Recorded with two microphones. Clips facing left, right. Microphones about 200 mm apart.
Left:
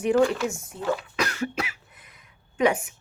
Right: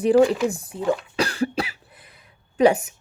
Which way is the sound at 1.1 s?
30° right (ahead or behind).